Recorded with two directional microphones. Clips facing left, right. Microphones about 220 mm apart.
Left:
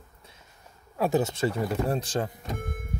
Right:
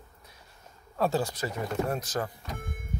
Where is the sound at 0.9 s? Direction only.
15° left (ahead or behind).